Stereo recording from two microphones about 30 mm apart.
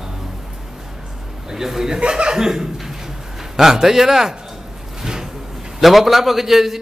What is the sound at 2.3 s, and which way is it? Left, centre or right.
A man's voice, centre.